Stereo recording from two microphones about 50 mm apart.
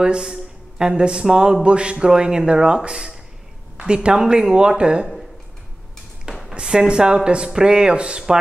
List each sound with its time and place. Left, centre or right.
0.0 s a man's voice: centre
6.5 s a man's voice: centre